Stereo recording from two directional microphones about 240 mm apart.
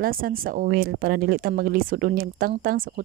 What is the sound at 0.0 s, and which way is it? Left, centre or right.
Speech, right.